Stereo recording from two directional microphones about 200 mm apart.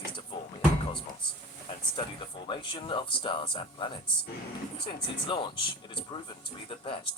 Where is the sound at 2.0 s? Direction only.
25° left (ahead or behind).